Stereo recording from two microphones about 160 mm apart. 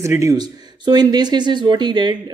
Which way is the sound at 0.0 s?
20° right (ahead or behind).